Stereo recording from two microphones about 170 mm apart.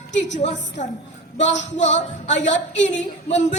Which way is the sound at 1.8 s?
40° left (ahead or behind).